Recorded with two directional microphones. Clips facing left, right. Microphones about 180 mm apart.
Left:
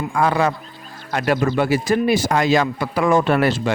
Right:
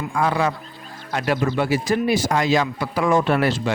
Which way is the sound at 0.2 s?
55° left (ahead or behind).